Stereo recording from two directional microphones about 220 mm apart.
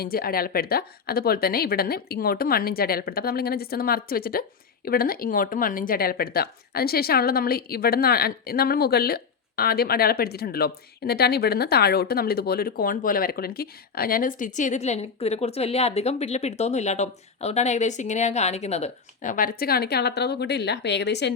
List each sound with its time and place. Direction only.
0.0 s speech: 45° left (ahead or behind)